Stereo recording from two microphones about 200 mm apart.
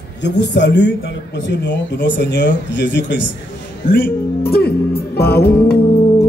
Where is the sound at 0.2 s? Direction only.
60° left (ahead or behind).